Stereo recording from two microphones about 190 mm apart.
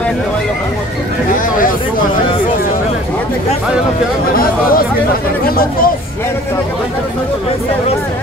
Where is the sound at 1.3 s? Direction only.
45° left (ahead or behind).